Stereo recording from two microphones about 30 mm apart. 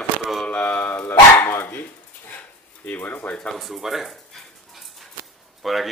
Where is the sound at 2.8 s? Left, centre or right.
Left.